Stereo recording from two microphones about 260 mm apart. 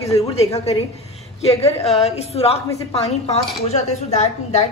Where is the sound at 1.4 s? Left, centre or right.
Left.